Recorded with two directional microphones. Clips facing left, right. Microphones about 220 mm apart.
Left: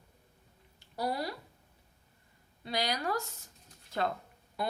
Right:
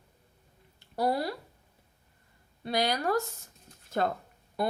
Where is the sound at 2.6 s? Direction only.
50° right (ahead or behind).